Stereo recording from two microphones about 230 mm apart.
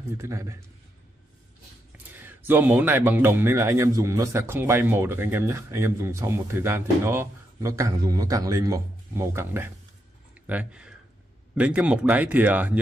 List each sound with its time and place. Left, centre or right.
0.2 s speech: centre
1.9 s speech: centre